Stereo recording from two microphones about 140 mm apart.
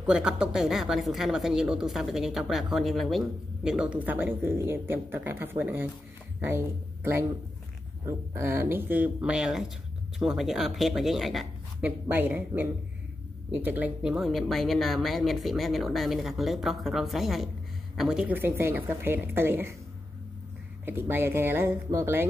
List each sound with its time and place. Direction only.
0.0 s a woman's voice: 5° right (ahead or behind)
11.8 s a woman's voice: 15° right (ahead or behind)
20.8 s a woman's voice: 15° right (ahead or behind)